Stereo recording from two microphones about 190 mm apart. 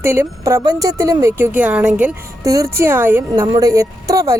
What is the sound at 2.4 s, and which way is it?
A woman's voice, 15° right (ahead or behind).